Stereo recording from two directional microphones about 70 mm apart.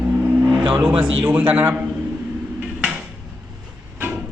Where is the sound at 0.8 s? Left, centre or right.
Centre.